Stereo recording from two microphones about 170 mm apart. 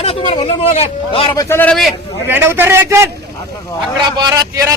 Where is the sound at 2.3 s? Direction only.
15° right (ahead or behind).